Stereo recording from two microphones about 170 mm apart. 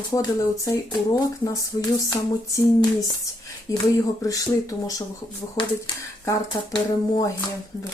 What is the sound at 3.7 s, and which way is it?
Speech, 20° left (ahead or behind).